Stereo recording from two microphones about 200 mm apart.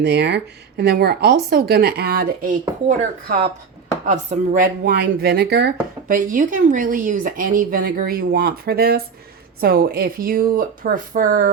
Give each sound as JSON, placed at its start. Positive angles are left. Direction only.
{"t": 0.0, "sound": "speech", "side_deg": -60}
{"t": 4.0, "sound": "speech", "side_deg": -35}
{"t": 6.1, "sound": "speech", "side_deg": -45}